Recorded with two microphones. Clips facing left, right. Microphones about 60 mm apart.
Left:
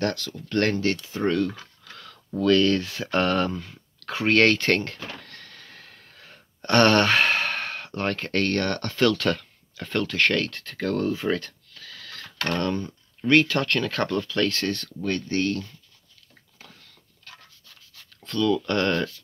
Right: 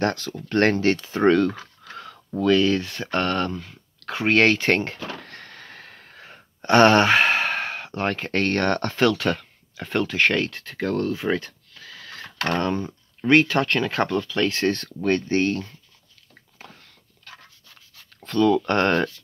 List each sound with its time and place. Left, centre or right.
0.0 s speech: right
1.0 s speech: right
1.6 s speech: right
5.2 s a sound: right
6.6 s speech: centre
9.1 s speech: centre
11.2 s a sound: centre
14.0 s speech: centre
14.6 s speech: right
18.2 s speech: right